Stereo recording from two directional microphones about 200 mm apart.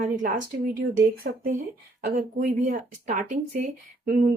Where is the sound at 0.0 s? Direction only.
40° right (ahead or behind).